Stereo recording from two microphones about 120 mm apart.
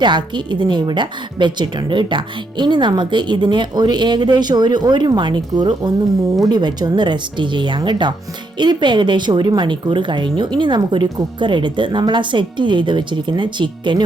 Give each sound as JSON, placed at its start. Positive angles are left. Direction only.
{"t": 0.0, "sound": "a woman's voice", "side_deg": -40}